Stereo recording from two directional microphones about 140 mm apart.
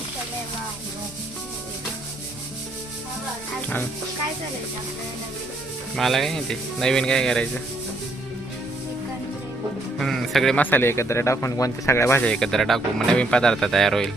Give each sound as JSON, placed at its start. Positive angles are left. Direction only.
{"t": 6.0, "sound": "speech", "side_deg": 0}
{"t": 10.0, "sound": "speech", "side_deg": 0}
{"t": 12.2, "sound": "speech", "side_deg": 5}